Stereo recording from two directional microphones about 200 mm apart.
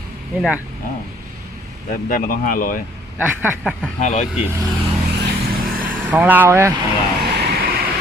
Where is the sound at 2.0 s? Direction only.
45° left (ahead or behind).